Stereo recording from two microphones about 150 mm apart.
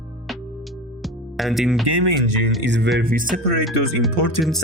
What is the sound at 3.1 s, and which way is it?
Speech, 65° right (ahead or behind).